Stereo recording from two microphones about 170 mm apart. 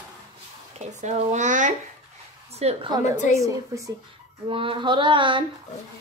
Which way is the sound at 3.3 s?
20° right (ahead or behind).